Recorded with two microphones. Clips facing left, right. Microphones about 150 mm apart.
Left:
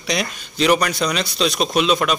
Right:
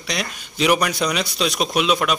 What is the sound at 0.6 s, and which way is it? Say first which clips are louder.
A man's voice: left 1 dB; 10° right (ahead or behind).